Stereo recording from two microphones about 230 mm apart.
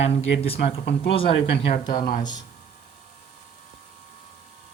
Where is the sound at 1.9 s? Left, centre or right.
Left.